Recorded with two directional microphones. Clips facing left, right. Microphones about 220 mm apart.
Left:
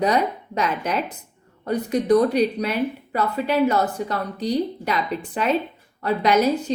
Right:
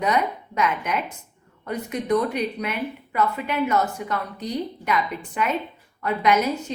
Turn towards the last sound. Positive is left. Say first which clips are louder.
# left 3 dB
turn(degrees=30)  # may be behind; listen again after turning